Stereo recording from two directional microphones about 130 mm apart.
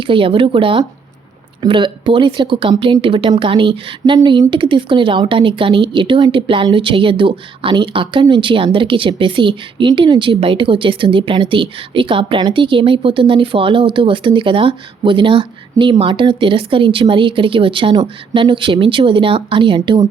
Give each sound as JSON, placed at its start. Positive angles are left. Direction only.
{"t": 0.0, "sound": "speech", "side_deg": -40}